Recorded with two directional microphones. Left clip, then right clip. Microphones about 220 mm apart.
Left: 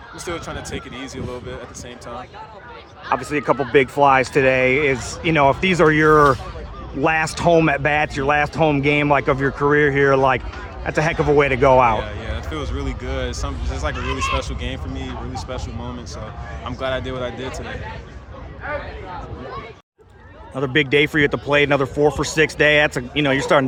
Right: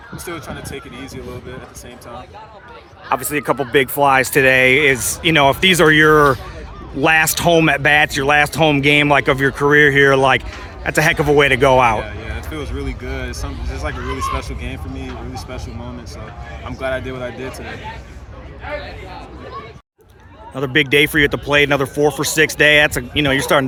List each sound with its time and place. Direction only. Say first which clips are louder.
0.3 s speech: left 1 dB; 10° left (ahead or behind)
3.1 s speech: right 1 dB; 5° right (ahead or behind)
11.9 s speech: right 1 dB; 5° left (ahead or behind)
14.0 s speech: right 1 dB; 25° left (ahead or behind)
14.3 s speech: left 1 dB; 10° left (ahead or behind)
20.6 s speech: right 3 dB; centre (ahead or behind)